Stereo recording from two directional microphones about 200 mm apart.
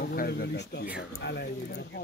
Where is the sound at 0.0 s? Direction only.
50° left (ahead or behind).